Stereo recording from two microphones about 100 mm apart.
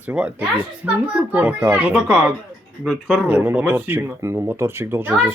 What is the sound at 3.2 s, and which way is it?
Speech, 15° right (ahead or behind).